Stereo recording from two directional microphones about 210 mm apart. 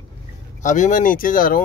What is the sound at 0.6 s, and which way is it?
Speech, 35° left (ahead or behind).